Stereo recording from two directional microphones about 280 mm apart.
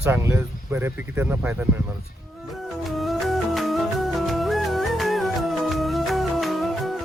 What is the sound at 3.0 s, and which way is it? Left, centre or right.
Music, centre.